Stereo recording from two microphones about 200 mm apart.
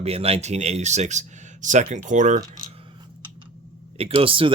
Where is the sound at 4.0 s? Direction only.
25° right (ahead or behind).